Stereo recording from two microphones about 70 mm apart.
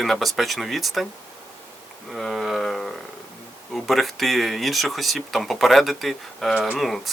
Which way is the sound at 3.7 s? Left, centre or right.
Centre.